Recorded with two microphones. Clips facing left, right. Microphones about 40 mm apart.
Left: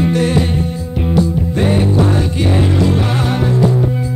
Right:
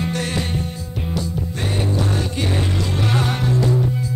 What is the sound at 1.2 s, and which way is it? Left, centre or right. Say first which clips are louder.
Music: left 11 dB; left.